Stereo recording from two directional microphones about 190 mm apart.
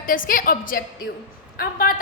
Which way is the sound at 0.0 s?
45° left (ahead or behind).